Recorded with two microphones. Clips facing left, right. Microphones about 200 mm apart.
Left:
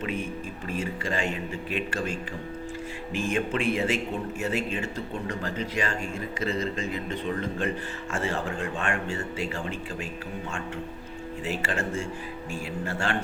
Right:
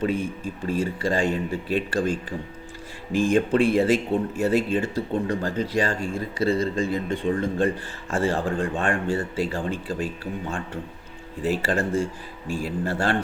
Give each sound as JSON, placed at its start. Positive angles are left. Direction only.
{"t": 0.7, "sound": "speech", "side_deg": -35}
{"t": 11.4, "sound": "speech", "side_deg": -35}